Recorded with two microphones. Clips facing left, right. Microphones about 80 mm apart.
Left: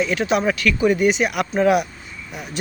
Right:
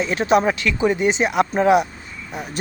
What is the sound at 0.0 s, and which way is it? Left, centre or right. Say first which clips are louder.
Speech: right 2 dB; right.